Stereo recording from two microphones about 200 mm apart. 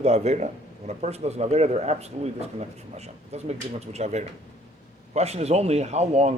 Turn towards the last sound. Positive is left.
turn(degrees=-35)  # may be behind; listen again after turning